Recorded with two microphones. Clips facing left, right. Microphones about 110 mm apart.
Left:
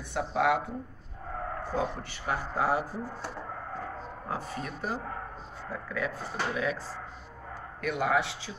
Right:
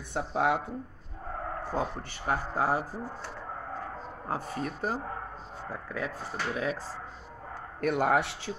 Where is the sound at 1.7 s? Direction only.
45° right (ahead or behind).